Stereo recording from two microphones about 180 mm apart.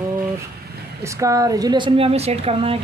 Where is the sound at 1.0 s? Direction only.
15° right (ahead or behind); by 2.7 s 35° right (ahead or behind).